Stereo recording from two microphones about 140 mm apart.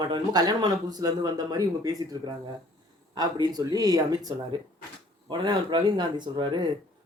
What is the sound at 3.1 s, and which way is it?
Speech, 30° right (ahead or behind).